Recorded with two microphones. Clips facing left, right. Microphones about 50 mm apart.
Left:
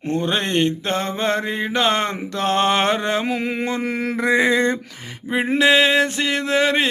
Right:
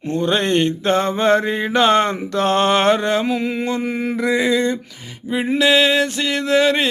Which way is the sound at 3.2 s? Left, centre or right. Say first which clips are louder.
Right 2 dB; left.